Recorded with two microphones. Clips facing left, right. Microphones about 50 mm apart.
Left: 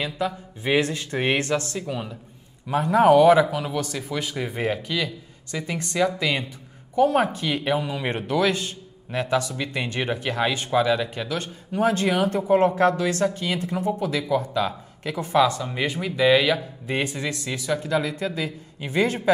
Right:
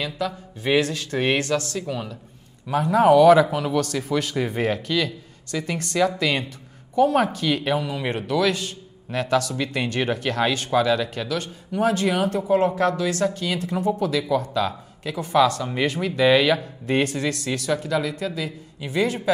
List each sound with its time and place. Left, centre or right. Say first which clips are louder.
0.0 s a man's voice: even; left
2.7 s speech: even; left
4.4 s speech: right 4 dB; centre
4.6 s speech: right 2 dB; centre
7.0 s a man's voice: right 1 dB; left
11.3 s speech: even; left; by 14.8 s centre
15.0 s a man's voice: right 1 dB; left
15.8 s speech: right 2 dB; centre
16.8 s speech: right 4 dB; centre; by 19.1 s left